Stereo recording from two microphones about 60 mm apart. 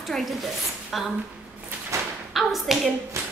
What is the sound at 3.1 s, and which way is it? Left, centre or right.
Tap, right.